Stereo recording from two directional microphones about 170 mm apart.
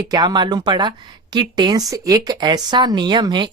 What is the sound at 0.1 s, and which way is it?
Speech, 25° right (ahead or behind).